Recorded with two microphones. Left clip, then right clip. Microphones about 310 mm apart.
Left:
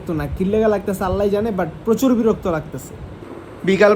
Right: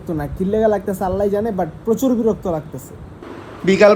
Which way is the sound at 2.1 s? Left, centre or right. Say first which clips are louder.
Left 1 dB; centre.